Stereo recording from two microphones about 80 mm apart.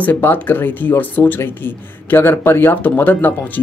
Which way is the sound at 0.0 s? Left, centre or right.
Left.